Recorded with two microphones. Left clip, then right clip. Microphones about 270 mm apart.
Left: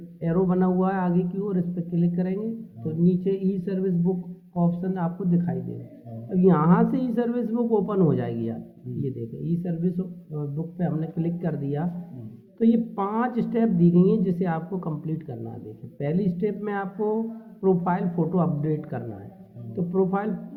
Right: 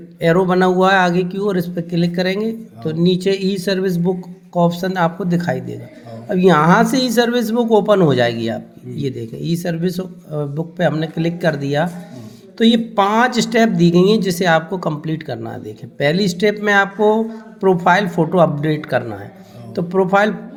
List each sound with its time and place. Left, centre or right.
0.2 s speech: right